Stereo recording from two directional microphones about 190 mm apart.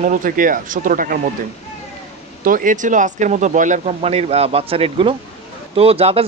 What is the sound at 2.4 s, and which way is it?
Speech, 45° right (ahead or behind).